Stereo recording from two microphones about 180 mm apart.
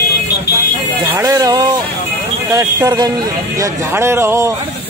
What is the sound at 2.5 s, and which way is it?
Speech, 20° right (ahead or behind).